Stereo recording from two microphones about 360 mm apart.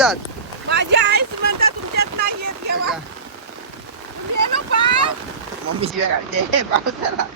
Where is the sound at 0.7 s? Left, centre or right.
Right.